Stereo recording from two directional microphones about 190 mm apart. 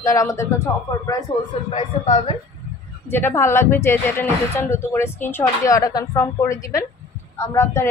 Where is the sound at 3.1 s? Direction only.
10° left (ahead or behind).